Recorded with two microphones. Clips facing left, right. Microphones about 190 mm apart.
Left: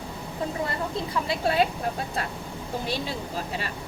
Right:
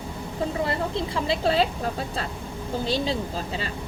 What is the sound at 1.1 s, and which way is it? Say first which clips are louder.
Speech: right 2 dB; 25° right (ahead or behind).